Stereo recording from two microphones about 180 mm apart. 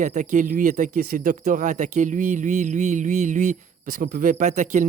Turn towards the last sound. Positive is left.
turn(degrees=-40)  # may be behind; listen again after turning